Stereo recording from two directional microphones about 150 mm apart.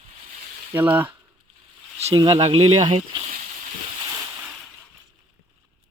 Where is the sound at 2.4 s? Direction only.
40° right (ahead or behind).